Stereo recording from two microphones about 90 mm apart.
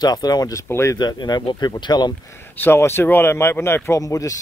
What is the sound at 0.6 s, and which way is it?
Speech, 30° left (ahead or behind).